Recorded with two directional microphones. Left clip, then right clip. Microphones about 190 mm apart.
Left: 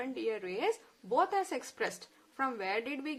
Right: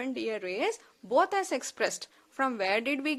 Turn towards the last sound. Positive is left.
turn(degrees=-55)  # may be behind; listen again after turning